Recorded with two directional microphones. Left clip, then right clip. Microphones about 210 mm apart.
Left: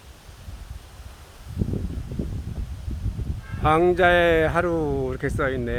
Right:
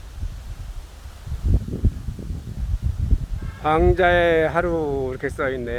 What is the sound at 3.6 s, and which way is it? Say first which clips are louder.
Speech: even; 5° left (ahead or behind).